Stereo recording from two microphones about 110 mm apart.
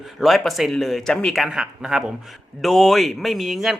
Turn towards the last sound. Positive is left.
turn(degrees=0)  # may be behind; listen again after turning